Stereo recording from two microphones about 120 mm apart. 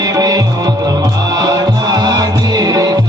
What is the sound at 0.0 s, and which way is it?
Music, 30° right (ahead or behind).